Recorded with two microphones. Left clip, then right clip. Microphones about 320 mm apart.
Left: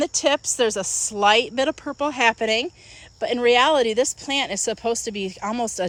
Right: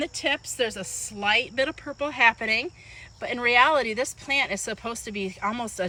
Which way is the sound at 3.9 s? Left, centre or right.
Left.